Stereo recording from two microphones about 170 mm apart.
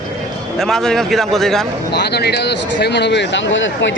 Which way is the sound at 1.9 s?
75° left (ahead or behind).